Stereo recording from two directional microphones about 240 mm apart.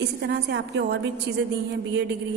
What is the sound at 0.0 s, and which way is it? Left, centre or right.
A woman's voice, right.